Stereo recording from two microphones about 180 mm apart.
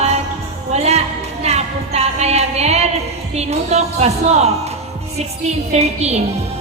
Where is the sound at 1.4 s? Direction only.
35° right (ahead or behind).